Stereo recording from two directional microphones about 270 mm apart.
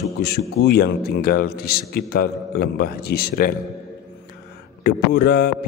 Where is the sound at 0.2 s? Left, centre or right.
Left.